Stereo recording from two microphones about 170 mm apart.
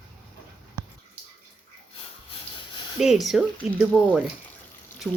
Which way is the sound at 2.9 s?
Centre (ahead or behind).